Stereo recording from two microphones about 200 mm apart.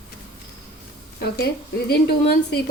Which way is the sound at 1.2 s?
55° left (ahead or behind).